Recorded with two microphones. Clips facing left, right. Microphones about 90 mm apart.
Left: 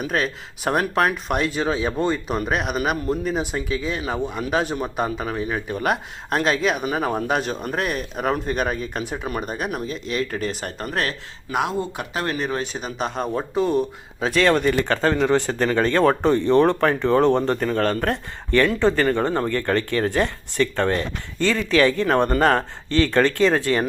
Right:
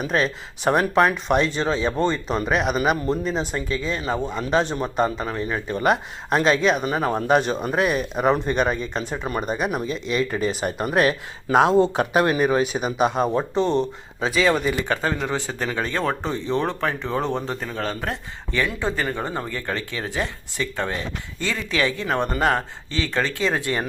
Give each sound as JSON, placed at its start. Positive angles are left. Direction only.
{"t": 0.0, "sound": "speech", "side_deg": 5}
{"t": 11.5, "sound": "speech", "side_deg": -25}
{"t": 14.3, "sound": "speech", "side_deg": -5}
{"t": 21.8, "sound": "speech", "side_deg": 40}
{"t": 23.6, "sound": "speech", "side_deg": -20}